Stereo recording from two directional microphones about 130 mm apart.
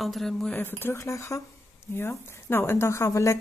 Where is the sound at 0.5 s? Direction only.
15° left (ahead or behind).